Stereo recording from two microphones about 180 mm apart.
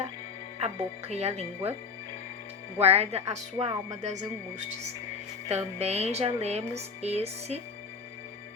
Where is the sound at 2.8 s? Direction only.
35° right (ahead or behind).